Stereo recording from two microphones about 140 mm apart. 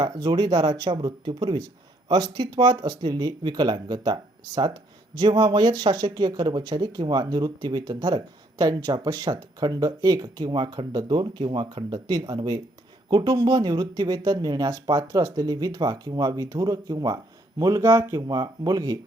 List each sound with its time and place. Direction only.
0.0 s speech: 30° right (ahead or behind)